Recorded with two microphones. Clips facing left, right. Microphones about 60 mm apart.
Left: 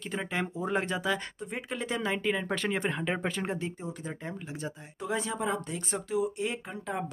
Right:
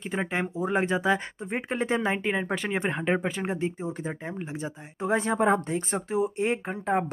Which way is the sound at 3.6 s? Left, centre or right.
Right.